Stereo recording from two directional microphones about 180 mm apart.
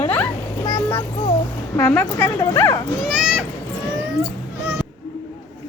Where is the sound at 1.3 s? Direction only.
15° left (ahead or behind).